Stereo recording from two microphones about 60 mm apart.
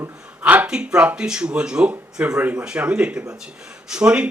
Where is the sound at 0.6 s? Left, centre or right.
Centre.